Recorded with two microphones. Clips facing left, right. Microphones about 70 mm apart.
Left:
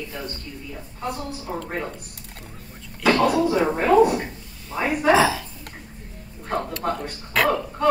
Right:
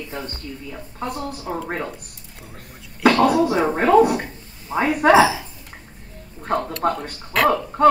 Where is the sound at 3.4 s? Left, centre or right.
Right.